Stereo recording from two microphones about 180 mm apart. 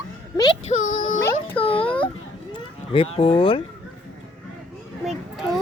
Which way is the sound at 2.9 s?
30° left (ahead or behind).